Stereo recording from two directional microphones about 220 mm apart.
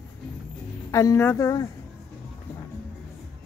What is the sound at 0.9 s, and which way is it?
Speech, 15° left (ahead or behind).